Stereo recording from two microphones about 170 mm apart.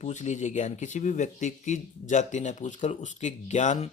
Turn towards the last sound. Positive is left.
turn(degrees=40)  # may be behind; listen again after turning